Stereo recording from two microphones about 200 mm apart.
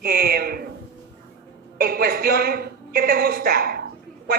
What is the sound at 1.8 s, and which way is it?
A woman's voice, 50° right (ahead or behind).